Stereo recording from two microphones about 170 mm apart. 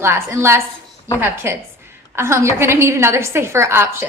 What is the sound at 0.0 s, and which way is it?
A woman's voice, 15° right (ahead or behind).